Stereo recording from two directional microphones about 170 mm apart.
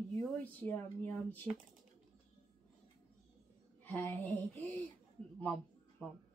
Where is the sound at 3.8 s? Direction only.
10° left (ahead or behind).